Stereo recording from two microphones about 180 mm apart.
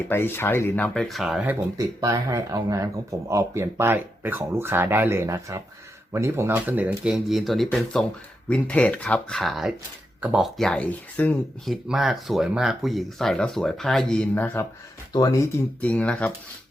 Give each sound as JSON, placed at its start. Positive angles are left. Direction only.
{"t": 0.1, "sound": "speech", "side_deg": 10}
{"t": 1.8, "sound": "speech", "side_deg": -20}